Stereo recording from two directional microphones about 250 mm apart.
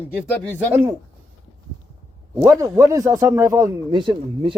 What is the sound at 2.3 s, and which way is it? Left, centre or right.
A man's voice, centre.